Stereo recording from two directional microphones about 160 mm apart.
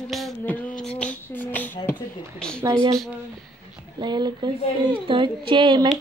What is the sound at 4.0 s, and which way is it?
A woman's voice, 25° right (ahead or behind).